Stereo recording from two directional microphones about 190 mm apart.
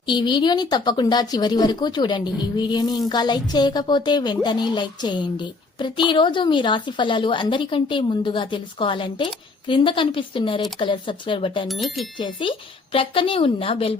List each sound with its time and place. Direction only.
0.0 s a woman's voice: 25° left (ahead or behind)
11.7 s speech: centre (ahead or behind)
12.1 s a woman's voice: 25° left (ahead or behind)